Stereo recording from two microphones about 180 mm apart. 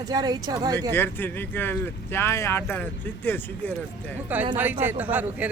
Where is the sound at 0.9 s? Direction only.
10° left (ahead or behind).